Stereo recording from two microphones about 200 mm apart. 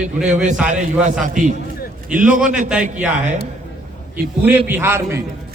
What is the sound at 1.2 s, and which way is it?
A man's voice, 40° right (ahead or behind).